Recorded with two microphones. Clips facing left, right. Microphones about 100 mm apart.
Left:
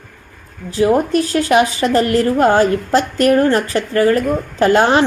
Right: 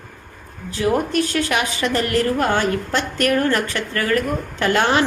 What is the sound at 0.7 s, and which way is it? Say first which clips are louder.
A woman's voice: left 6 dB; 30° left (ahead or behind).